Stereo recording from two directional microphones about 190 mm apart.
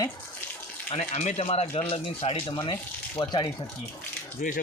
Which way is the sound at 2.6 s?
15° left (ahead or behind).